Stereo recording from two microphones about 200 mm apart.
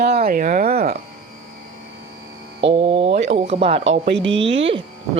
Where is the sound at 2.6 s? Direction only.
25° right (ahead or behind).